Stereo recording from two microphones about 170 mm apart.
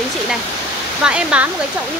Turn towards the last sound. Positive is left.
turn(degrees=-5)  # may be behind; listen again after turning